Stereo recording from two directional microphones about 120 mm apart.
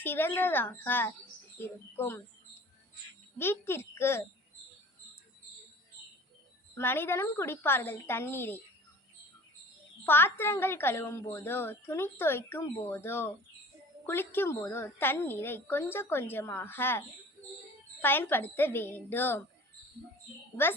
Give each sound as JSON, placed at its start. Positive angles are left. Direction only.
{"t": 0.0, "sound": "a woman's voice", "side_deg": 20}
{"t": 3.3, "sound": "a woman's voice", "side_deg": 20}
{"t": 6.7, "sound": "a woman's voice", "side_deg": 20}
{"t": 10.0, "sound": "a woman's voice", "side_deg": 20}